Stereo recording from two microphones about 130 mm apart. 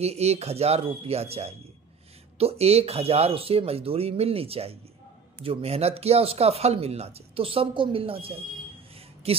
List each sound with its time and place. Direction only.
0.0 s speech: 55° right (ahead or behind)